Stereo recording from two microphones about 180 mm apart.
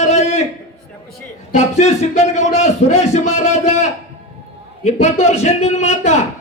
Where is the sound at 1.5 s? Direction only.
35° left (ahead or behind).